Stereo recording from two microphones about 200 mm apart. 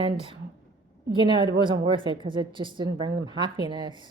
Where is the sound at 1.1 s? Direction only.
25° right (ahead or behind).